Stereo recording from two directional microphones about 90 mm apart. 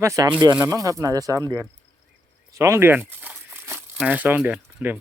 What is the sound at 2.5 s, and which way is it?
Crumpling, 35° right (ahead or behind).